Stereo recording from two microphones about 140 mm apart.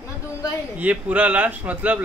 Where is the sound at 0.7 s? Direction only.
10° right (ahead or behind).